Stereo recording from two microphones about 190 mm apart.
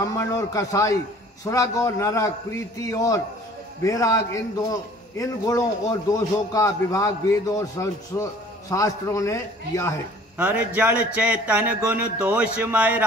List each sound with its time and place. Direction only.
0.0 s a man's voice: 15° left (ahead or behind)
10.3 s speech: 10° right (ahead or behind)